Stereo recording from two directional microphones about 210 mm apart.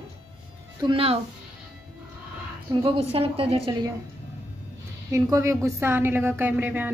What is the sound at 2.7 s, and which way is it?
A woman's voice, 25° right (ahead or behind).